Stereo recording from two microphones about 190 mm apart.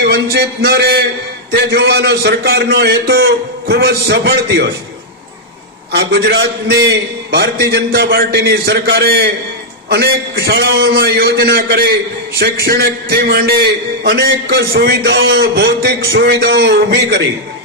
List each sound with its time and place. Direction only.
0.1 s a man's voice: 55° right (ahead or behind)
5.9 s a man's voice: 65° right (ahead or behind)
6.8 s a man's voice: 60° right (ahead or behind)